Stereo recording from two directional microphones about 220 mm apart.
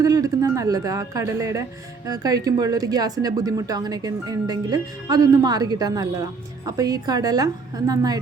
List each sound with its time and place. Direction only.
0.0 s speech: 15° right (ahead or behind)